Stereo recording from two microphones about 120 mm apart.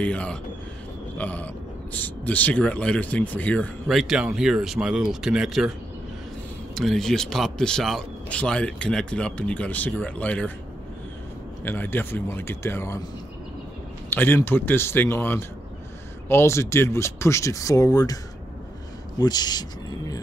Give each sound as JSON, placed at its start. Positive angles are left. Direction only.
{"t": 0.0, "sound": "a man's voice", "side_deg": 10}
{"t": 3.9, "sound": "speech", "side_deg": -5}
{"t": 6.7, "sound": "a man's voice", "side_deg": 0}
{"t": 11.6, "sound": "speech", "side_deg": 15}
{"t": 14.1, "sound": "a man's voice", "side_deg": 20}